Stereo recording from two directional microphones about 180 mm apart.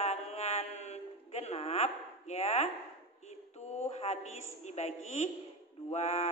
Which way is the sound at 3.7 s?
35° left (ahead or behind).